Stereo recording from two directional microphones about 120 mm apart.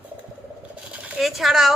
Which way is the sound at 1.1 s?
Centre (ahead or behind).